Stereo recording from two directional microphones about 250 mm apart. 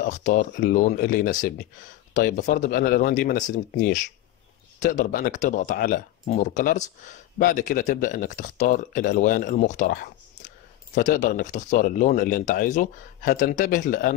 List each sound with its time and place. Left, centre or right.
0.0 s speech: left